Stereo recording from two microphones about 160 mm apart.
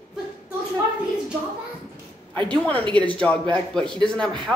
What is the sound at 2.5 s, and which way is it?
A woman's voice, 10° left (ahead or behind).